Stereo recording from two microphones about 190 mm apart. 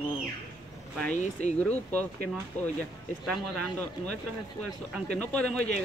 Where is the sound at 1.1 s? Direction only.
40° left (ahead or behind).